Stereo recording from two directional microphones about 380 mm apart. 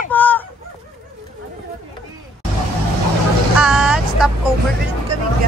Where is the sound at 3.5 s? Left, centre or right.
Centre.